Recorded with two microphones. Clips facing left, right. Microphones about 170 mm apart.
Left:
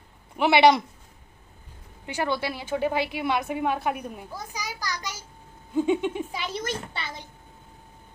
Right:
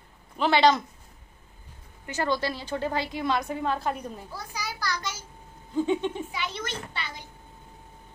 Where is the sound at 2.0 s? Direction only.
15° left (ahead or behind).